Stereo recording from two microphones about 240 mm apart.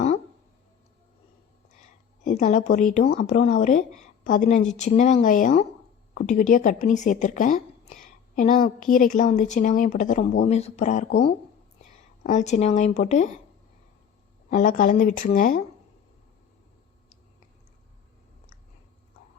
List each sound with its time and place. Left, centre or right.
2.2 s speech: left
3.2 s a woman's voice: left
14.5 s speech: left